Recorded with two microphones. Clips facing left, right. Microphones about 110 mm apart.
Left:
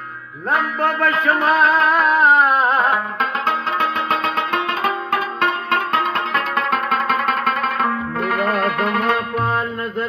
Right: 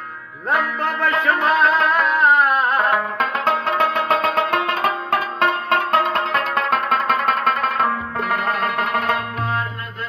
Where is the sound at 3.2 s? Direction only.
55° right (ahead or behind); by 7.9 s 25° right (ahead or behind).